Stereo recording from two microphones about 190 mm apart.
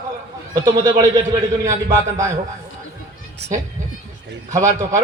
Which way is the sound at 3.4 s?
65° right (ahead or behind).